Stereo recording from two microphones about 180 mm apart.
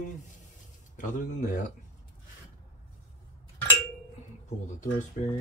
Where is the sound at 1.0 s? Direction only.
45° left (ahead or behind).